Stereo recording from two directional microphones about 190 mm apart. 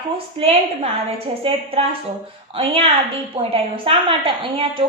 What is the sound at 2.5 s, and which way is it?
A woman's voice, 30° right (ahead or behind).